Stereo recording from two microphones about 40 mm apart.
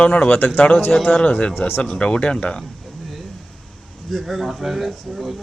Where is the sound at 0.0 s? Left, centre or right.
Left.